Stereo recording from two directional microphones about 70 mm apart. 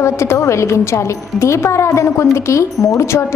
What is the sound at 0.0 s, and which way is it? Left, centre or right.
A woman's voice, left.